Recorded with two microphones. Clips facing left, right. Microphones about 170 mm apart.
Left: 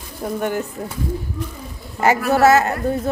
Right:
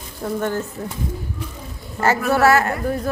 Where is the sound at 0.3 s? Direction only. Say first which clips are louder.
Left 1 dB; 15° left (ahead or behind).